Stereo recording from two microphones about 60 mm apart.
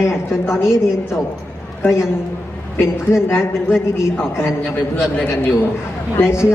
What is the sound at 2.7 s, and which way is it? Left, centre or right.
A woman's voice, left.